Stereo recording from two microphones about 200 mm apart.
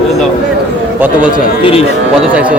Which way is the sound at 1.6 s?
30° left (ahead or behind).